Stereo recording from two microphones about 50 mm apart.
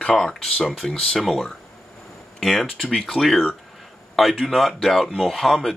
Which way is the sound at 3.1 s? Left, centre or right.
Centre.